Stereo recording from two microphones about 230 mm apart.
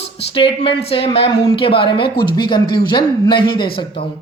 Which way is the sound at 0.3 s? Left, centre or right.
Left.